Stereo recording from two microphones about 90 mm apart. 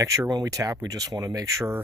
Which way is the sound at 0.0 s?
35° right (ahead or behind).